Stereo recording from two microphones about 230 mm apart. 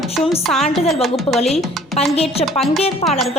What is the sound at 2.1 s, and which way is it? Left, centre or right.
Speech, left.